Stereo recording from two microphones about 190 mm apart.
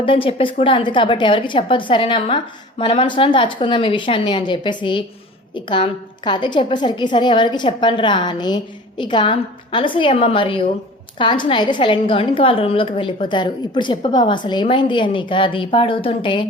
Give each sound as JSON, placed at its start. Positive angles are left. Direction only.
{"t": 0.0, "sound": "a woman's voice", "side_deg": 30}